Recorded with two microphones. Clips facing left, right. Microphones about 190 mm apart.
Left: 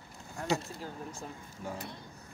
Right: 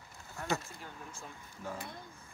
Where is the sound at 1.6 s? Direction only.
15° left (ahead or behind).